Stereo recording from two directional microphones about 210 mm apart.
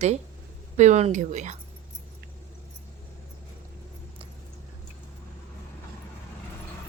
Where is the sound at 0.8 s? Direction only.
35° right (ahead or behind).